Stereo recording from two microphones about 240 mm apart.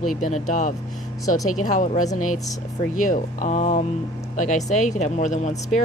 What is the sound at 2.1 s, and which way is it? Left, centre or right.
Speech, left.